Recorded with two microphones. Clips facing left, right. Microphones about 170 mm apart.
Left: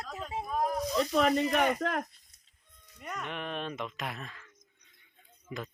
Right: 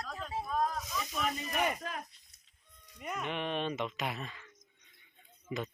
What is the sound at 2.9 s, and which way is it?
Speech, 10° right (ahead or behind).